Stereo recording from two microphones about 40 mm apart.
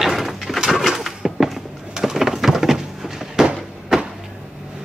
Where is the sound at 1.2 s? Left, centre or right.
Centre.